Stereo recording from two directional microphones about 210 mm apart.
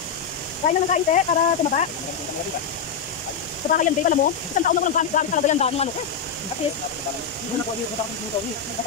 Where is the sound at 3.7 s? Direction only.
40° left (ahead or behind).